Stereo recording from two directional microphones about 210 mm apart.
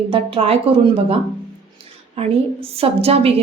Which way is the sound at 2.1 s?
30° right (ahead or behind).